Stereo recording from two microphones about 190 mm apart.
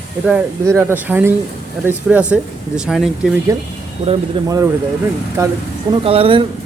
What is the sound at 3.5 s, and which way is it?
Speech, 15° right (ahead or behind).